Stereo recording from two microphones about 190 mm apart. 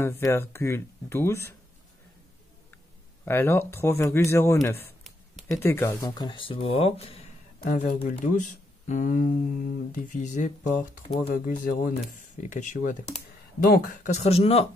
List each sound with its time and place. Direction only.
0.0 s speech: 15° left (ahead or behind)
3.3 s speech: 10° left (ahead or behind); by 7.2 s 30° left (ahead or behind)
7.6 s speech: 45° left (ahead or behind)
11.1 s speech: 55° left (ahead or behind); by 14.7 s 35° left (ahead or behind)